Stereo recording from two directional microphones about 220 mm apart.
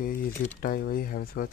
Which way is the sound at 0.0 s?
40° left (ahead or behind).